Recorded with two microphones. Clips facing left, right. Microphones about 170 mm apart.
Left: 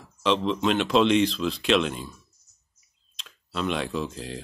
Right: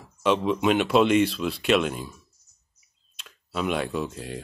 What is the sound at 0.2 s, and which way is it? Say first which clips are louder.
Speech: right 1 dB; 5° right (ahead or behind).